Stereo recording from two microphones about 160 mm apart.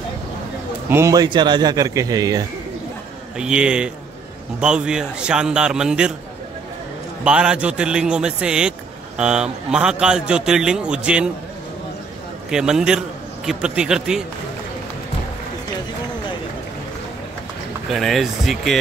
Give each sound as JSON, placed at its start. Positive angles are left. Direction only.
{"t": 0.8, "sound": "speech", "side_deg": -15}
{"t": 3.3, "sound": "a man's voice", "side_deg": -5}
{"t": 7.2, "sound": "a man's voice", "side_deg": -5}
{"t": 12.4, "sound": "a man's voice", "side_deg": -5}
{"t": 17.9, "sound": "a man's voice", "side_deg": 0}